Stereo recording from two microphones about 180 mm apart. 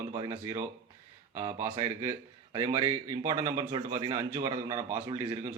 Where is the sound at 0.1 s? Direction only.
20° right (ahead or behind).